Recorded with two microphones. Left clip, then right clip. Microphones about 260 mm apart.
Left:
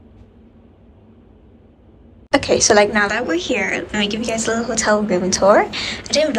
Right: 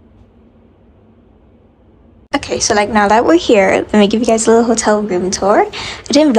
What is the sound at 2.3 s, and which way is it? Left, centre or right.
A woman's voice, centre.